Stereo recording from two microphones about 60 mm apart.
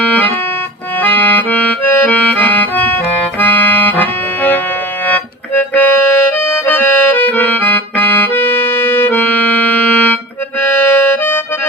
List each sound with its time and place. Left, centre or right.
1.0 s accordion: left
5.0 s music: left
6.7 s accordion: left
10.6 s music: left